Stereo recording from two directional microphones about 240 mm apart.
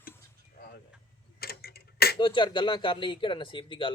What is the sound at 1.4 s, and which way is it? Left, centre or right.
Tick-tock, left.